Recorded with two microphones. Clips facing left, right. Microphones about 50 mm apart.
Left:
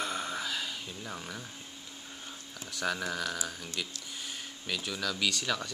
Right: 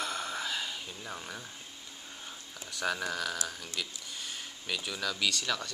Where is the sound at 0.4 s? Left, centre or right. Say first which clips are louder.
Even; centre.